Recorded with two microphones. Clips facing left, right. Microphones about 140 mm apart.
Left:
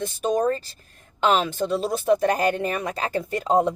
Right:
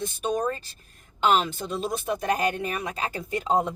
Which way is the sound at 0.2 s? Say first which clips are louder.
Left 5 dB; 40° left (ahead or behind).